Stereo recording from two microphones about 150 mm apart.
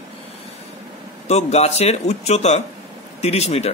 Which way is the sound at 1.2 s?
45° left (ahead or behind).